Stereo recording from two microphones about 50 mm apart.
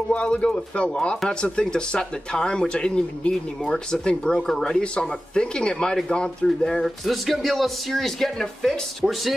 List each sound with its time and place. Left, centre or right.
0.1 s speech: left; by 8.7 s centre
9.0 s speech: centre